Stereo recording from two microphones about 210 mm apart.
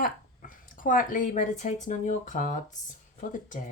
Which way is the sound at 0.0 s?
40° left (ahead or behind).